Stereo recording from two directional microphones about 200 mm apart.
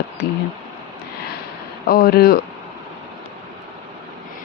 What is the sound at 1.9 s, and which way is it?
Speech, 50° left (ahead or behind).